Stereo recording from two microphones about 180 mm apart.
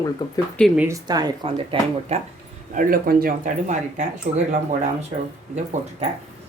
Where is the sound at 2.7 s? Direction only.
50° right (ahead or behind).